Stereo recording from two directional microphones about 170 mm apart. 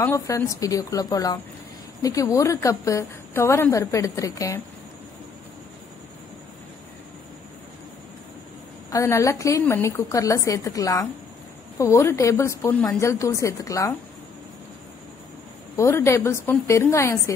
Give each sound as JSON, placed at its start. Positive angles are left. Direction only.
{"t": 0.0, "sound": "a woman's voice", "side_deg": 15}
{"t": 8.9, "sound": "a woman's voice", "side_deg": 20}
{"t": 15.7, "sound": "a woman's voice", "side_deg": 15}